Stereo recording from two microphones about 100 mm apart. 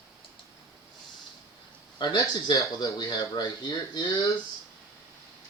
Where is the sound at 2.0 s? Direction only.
35° left (ahead or behind).